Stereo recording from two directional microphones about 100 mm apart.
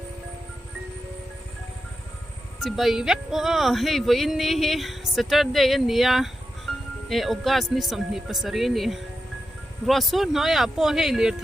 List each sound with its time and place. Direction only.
2.6 s speech: centre (ahead or behind)